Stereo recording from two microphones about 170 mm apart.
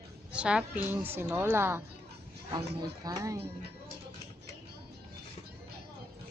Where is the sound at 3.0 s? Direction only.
20° right (ahead or behind).